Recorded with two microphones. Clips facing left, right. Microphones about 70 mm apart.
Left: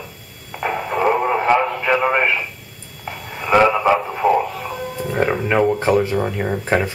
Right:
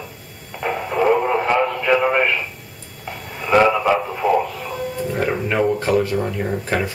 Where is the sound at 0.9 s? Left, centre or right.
Centre.